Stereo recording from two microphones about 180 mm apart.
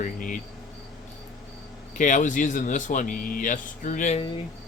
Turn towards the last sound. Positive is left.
turn(degrees=40)  # may be behind; listen again after turning